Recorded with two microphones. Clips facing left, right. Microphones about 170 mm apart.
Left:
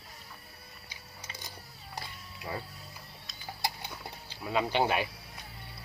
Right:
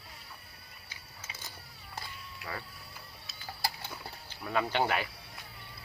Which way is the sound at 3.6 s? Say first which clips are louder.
Left 1 dB; 20° left (ahead or behind).